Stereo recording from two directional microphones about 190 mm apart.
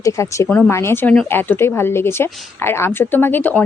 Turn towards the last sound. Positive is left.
turn(degrees=10)  # may be behind; listen again after turning